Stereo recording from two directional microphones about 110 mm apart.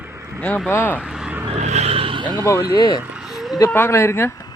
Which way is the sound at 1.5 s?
90° right.